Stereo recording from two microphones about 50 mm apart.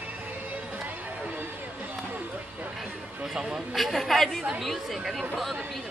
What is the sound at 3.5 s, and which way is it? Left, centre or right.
A woman's voice, centre.